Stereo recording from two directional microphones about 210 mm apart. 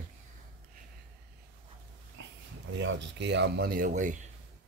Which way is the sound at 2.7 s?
55° right (ahead or behind).